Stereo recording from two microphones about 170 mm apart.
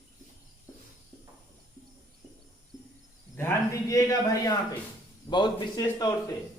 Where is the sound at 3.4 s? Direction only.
15° left (ahead or behind).